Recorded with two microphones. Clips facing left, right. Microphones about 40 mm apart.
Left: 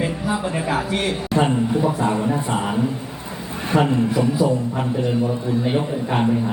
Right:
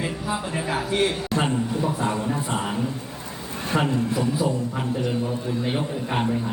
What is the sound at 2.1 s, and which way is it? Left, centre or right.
Music, left.